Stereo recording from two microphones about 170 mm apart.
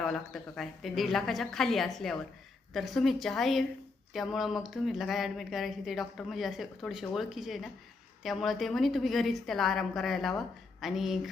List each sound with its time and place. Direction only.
0.0 s speech: centre (ahead or behind)